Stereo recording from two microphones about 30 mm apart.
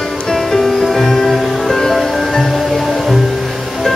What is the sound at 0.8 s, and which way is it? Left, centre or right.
Music, centre.